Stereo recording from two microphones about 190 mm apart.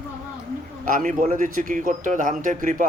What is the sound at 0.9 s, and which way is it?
A man's voice, 40° right (ahead or behind).